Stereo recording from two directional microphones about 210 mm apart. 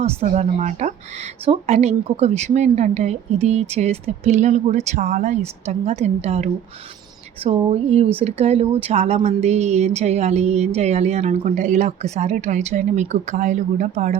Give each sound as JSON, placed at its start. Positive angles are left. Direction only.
{"t": 0.0, "sound": "speech", "side_deg": -30}